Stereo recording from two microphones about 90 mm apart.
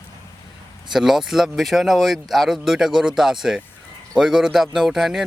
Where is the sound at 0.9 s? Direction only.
5° right (ahead or behind).